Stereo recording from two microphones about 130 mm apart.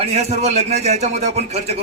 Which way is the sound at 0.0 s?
60° right (ahead or behind).